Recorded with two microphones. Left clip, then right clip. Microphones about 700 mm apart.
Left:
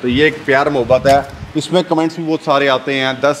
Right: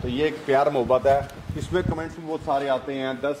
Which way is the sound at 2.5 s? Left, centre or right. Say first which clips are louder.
Left 11 dB; left.